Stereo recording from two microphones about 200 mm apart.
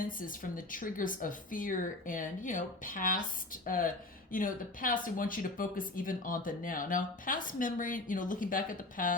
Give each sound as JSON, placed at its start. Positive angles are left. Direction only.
{"t": 0.0, "sound": "speech", "side_deg": 45}